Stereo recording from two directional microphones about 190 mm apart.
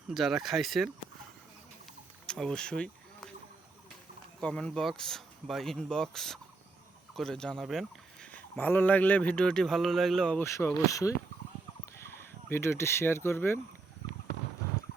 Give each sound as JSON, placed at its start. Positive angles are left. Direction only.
{"t": 0.1, "sound": "speech", "side_deg": 0}
{"t": 2.2, "sound": "rowboat", "side_deg": 5}
{"t": 4.4, "sound": "speech", "side_deg": 5}
{"t": 12.1, "sound": "speech", "side_deg": 15}